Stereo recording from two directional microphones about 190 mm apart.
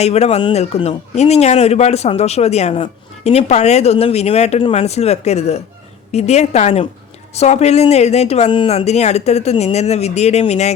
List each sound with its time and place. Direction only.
0.0 s speech: 35° left (ahead or behind)